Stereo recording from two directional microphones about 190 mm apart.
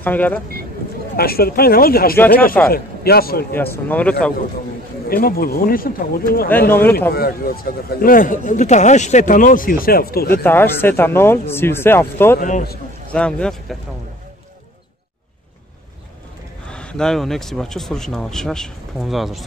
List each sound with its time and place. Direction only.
0.0 s speech: 10° left (ahead or behind)
1.1 s a man's voice: 55° left (ahead or behind)
2.1 s speech: 10° left (ahead or behind)
2.7 s a man's voice: 55° left (ahead or behind)
3.5 s speech: 10° left (ahead or behind)
5.0 s a man's voice: 50° left (ahead or behind)
6.7 s speech: 10° left (ahead or behind)
7.2 s a man's voice: 50° left (ahead or behind)
10.4 s speech: 10° left (ahead or behind)
12.4 s a man's voice: 45° left (ahead or behind)
13.1 s speech: 5° left (ahead or behind)
16.6 s speech: 5° left (ahead or behind)